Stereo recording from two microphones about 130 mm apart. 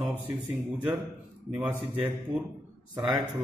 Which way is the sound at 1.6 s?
10° right (ahead or behind).